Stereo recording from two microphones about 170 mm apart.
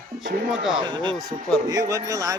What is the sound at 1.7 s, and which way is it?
Speech, 20° right (ahead or behind).